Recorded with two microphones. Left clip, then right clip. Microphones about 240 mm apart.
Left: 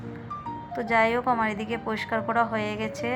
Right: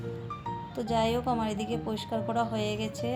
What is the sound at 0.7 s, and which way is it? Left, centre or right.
A woman's voice, centre.